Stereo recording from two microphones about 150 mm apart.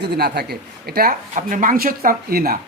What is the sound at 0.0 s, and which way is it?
Speech, 90° right.